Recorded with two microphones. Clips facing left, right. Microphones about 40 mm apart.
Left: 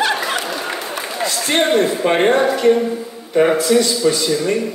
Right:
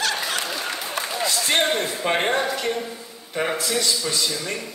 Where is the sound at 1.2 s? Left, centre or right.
Centre.